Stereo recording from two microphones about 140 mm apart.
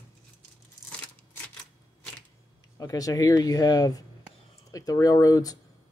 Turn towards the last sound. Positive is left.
turn(degrees=25)  # may be behind; listen again after turning